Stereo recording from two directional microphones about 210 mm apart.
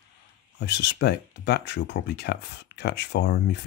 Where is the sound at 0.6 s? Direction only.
55° left (ahead or behind).